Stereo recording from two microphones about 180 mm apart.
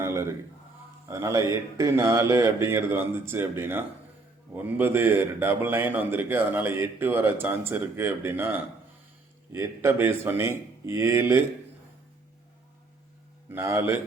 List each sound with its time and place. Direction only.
0.0 s a sound: 15° right (ahead or behind)
1.1 s a man's voice: 15° right (ahead or behind)
13.5 s a man's voice: 15° right (ahead or behind)